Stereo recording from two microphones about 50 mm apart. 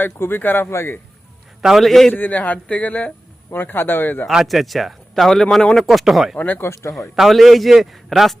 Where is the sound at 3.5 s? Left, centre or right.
Left.